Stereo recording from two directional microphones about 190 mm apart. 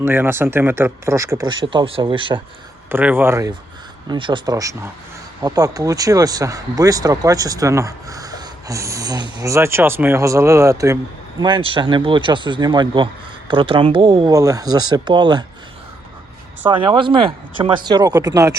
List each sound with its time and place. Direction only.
0.0 s speech: 10° right (ahead or behind)
2.9 s speech: 10° right (ahead or behind)
4.1 s speech: 25° right (ahead or behind)
16.6 s speech: 25° right (ahead or behind)